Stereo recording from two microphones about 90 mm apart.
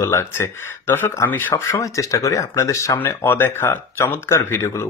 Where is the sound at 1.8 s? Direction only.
40° left (ahead or behind).